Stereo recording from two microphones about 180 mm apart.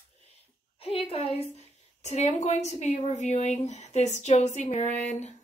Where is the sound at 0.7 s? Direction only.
30° left (ahead or behind).